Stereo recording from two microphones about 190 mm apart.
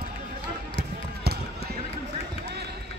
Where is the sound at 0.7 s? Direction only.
55° right (ahead or behind).